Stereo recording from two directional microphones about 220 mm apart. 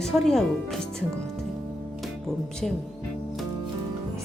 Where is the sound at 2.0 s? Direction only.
Centre (ahead or behind).